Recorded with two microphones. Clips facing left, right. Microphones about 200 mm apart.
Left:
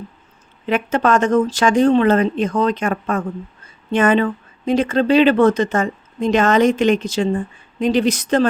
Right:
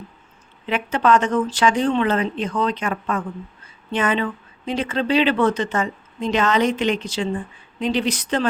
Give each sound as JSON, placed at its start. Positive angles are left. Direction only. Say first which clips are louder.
{"t": 0.7, "sound": "speech", "louder": "left 2 dB", "side_deg": 45}